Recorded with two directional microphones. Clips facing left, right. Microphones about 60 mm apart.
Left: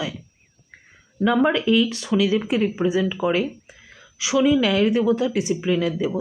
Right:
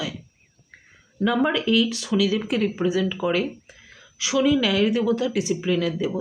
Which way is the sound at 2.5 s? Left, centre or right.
Centre.